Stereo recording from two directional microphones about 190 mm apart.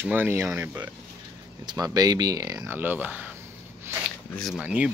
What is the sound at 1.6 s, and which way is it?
Speech, 20° right (ahead or behind).